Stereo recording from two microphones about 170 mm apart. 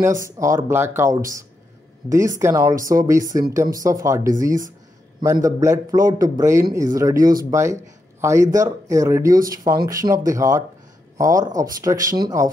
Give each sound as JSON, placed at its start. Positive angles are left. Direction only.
{"t": 0.0, "sound": "speech", "side_deg": -15}